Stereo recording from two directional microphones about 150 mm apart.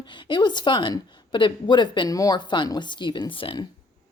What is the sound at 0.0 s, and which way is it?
A woman's voice, 30° left (ahead or behind).